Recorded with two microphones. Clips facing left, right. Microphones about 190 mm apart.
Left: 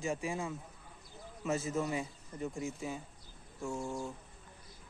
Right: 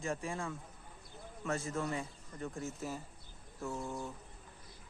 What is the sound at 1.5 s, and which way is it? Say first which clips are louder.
Speech: left 3 dB; centre (ahead or behind).